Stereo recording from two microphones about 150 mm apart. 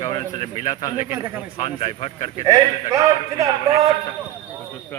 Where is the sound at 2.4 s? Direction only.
25° right (ahead or behind).